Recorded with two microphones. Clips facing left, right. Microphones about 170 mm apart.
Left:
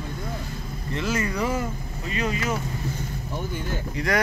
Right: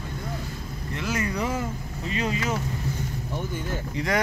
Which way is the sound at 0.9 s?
15° right (ahead or behind).